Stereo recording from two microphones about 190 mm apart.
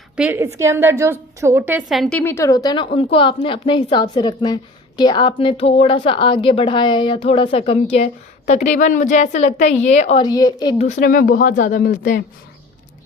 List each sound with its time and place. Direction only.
0.2 s a woman's voice: 10° right (ahead or behind); by 10.2 s 35° left (ahead or behind)
10.2 s a woman's voice: 20° left (ahead or behind)
10.8 s speech: 40° left (ahead or behind)